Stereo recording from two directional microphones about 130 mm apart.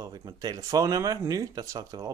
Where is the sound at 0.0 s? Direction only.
30° right (ahead or behind).